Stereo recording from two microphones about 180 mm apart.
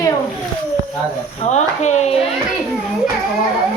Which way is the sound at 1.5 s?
40° left (ahead or behind).